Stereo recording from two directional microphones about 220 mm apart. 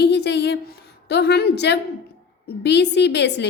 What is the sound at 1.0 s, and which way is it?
A woman's voice, 50° left (ahead or behind).